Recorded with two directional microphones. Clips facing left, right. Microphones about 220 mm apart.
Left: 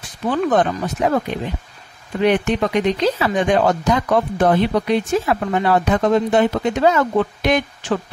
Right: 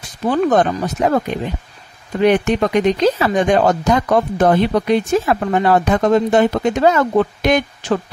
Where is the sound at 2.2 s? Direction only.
45° right (ahead or behind).